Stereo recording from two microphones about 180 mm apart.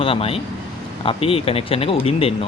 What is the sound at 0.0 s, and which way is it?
Speech, 30° left (ahead or behind).